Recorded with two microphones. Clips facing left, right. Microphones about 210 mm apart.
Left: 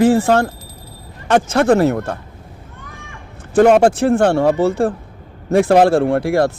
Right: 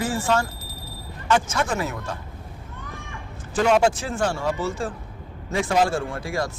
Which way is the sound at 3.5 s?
55° left (ahead or behind).